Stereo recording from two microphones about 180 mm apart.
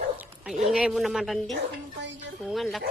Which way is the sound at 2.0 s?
80° right.